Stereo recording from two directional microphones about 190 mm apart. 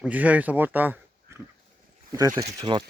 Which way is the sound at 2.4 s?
30° right (ahead or behind).